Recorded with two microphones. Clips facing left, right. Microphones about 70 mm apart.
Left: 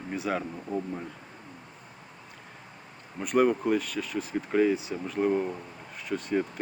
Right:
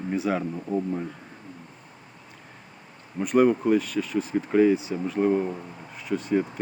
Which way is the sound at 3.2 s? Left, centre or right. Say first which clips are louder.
Right 4 dB; centre.